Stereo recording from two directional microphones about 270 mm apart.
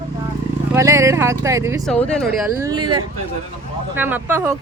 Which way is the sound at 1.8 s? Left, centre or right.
Centre.